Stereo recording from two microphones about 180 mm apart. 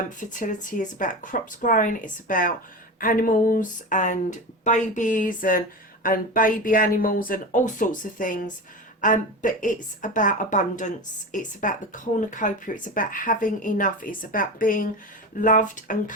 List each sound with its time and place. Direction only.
0.2 s speech: 45° left (ahead or behind)